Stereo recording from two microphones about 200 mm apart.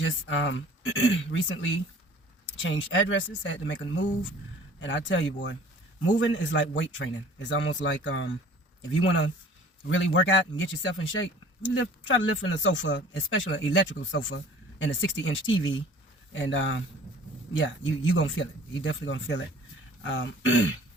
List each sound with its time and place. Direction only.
0.0 s speech: 70° left (ahead or behind)